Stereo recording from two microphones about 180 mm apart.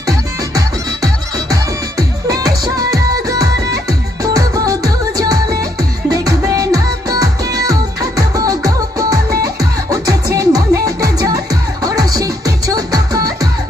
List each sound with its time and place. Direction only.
2.0 s music: 20° right (ahead or behind)